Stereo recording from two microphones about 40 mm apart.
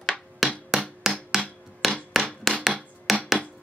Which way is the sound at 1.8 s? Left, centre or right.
Centre.